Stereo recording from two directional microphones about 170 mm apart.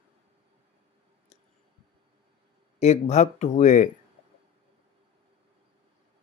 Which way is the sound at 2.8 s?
40° left (ahead or behind).